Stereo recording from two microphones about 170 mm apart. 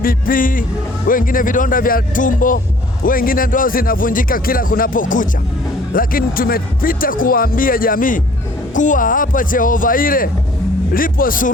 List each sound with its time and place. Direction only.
0.0 s a man's voice: 55° left (ahead or behind)